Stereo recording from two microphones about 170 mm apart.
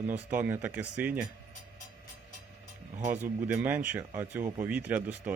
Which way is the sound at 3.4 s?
10° right (ahead or behind).